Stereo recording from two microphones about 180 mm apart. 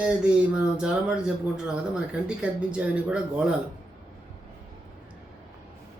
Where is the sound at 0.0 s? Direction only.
5° right (ahead or behind).